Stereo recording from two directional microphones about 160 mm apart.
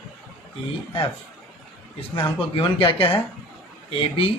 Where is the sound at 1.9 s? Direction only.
35° left (ahead or behind).